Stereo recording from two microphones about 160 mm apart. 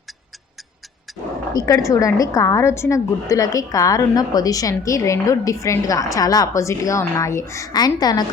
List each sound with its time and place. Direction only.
1.5 s a woman's voice: 20° left (ahead or behind)